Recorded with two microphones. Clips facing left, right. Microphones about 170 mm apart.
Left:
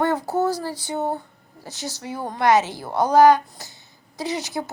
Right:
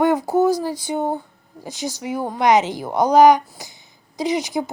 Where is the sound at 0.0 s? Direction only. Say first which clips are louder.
Right 5 dB; 10° right (ahead or behind).